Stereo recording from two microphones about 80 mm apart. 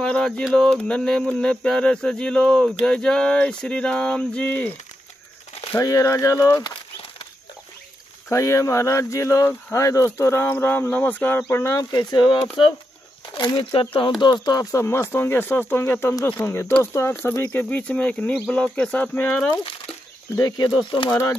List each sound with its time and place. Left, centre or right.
0.0 s speech: centre
0.6 s a sound: centre
5.8 s speech: left
8.3 s speech: left
11.8 s speech: left
13.4 s speech: left
14.2 s speech: left
14.7 s speech: left
17.5 s a sound: left
20.3 s speech: left